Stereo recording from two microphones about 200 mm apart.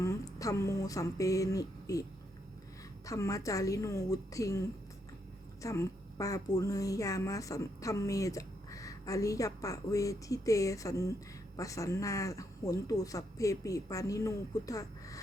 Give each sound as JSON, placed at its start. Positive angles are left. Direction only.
{"t": 0.0, "sound": "a woman's voice", "side_deg": 15}
{"t": 3.1, "sound": "a woman's voice", "side_deg": 15}
{"t": 5.6, "sound": "a woman's voice", "side_deg": 15}